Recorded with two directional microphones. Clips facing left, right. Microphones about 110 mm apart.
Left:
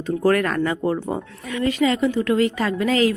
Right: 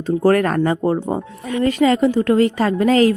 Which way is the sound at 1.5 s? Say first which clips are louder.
Right 4 dB; 40° right (ahead or behind).